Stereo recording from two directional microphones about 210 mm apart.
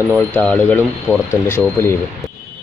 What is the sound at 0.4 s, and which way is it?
Speech, 5° left (ahead or behind).